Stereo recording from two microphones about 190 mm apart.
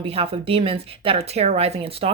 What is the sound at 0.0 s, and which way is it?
Speech, 30° right (ahead or behind).